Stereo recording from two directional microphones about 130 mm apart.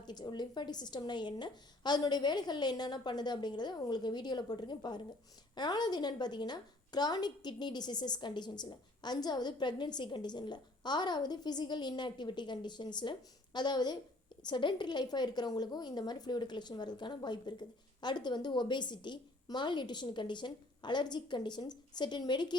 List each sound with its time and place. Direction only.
0.0 s a woman's voice: 35° left (ahead or behind)